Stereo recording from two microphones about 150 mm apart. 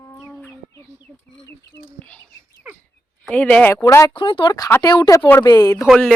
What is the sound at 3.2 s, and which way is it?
Speech, 10° left (ahead or behind).